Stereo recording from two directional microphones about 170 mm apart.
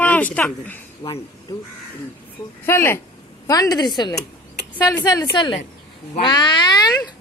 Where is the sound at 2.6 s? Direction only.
15° left (ahead or behind).